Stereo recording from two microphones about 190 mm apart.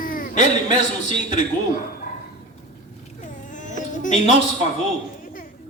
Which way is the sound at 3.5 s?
40° left (ahead or behind).